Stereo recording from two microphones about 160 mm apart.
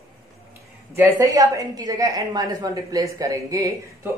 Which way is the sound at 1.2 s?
20° right (ahead or behind).